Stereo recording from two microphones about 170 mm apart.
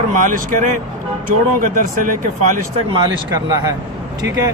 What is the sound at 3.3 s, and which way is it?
Speech, 20° right (ahead or behind).